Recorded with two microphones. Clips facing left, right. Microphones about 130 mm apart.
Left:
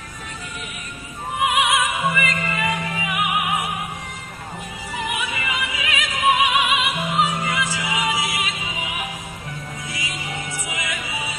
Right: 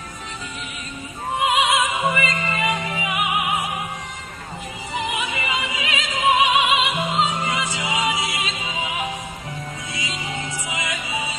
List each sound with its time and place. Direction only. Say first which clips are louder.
1.4 s music: even; 25° right (ahead or behind)
5.0 s music: even; 25° right (ahead or behind)